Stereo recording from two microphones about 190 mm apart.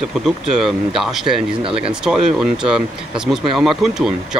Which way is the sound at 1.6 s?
30° right (ahead or behind).